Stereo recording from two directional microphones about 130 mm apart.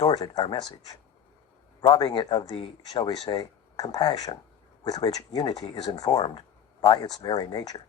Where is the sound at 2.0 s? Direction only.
35° left (ahead or behind).